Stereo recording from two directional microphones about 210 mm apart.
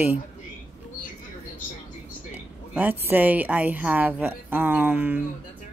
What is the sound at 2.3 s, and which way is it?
A woman's voice, 10° right (ahead or behind).